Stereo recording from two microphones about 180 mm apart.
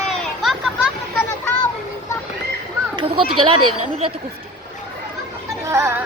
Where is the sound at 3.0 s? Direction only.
30° right (ahead or behind).